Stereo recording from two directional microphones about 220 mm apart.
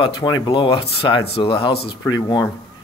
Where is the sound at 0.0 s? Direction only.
20° left (ahead or behind).